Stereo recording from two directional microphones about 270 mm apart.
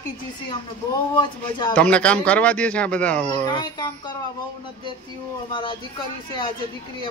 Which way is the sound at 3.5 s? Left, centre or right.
Centre.